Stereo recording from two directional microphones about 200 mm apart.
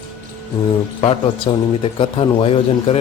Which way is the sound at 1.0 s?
25° left (ahead or behind).